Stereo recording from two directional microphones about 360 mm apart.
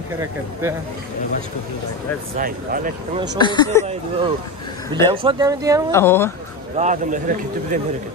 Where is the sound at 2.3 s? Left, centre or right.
Right.